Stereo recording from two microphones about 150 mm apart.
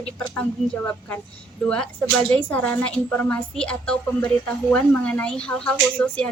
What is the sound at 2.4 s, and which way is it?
A woman's voice, 10° left (ahead or behind).